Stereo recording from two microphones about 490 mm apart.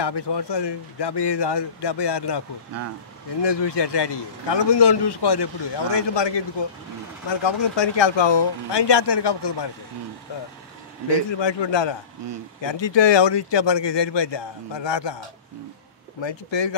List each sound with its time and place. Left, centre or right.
0.0 s speech: left
3.4 s a man's voice: left
11.2 s a man's voice: left